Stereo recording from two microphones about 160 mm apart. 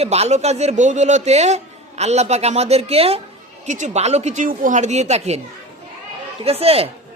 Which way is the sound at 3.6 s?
50° right (ahead or behind).